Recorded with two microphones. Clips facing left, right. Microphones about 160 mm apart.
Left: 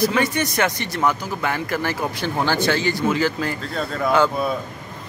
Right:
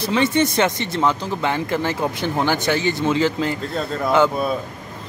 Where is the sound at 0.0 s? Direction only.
25° right (ahead or behind).